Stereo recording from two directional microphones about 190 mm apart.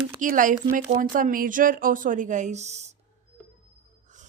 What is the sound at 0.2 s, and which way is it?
Speech, 45° right (ahead or behind).